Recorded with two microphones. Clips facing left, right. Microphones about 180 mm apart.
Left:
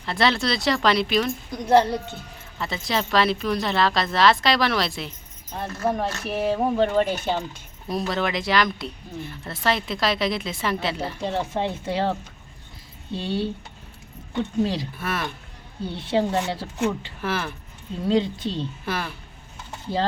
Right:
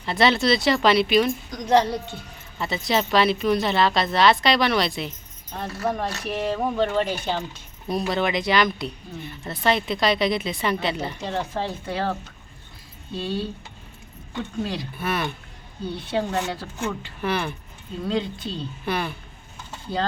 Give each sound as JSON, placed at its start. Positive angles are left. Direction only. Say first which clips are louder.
{"t": 0.0, "sound": "speech", "louder": "right 2 dB", "side_deg": 0}
{"t": 6.2, "sound": "a sound", "louder": "left 2 dB", "side_deg": 5}
{"t": 8.1, "sound": "speech", "louder": "right 1 dB", "side_deg": 0}
{"t": 11.3, "sound": "speech", "louder": "left 3 dB", "side_deg": 20}
{"t": 13.1, "sound": "speech", "louder": "left 1 dB", "side_deg": 25}
{"t": 14.9, "sound": "speech", "louder": "right 2 dB", "side_deg": 0}
{"t": 16.0, "sound": "speech", "louder": "left 3 dB", "side_deg": 25}
{"t": 17.2, "sound": "speech", "louder": "right 2 dB", "side_deg": 0}
{"t": 18.1, "sound": "speech", "louder": "left 5 dB", "side_deg": 25}
{"t": 18.9, "sound": "speech", "louder": "right 5 dB", "side_deg": 0}